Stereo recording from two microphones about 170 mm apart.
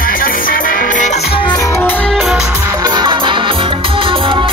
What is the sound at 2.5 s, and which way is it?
Music, 20° right (ahead or behind).